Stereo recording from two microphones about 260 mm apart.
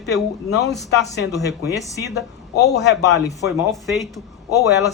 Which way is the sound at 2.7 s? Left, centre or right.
Left.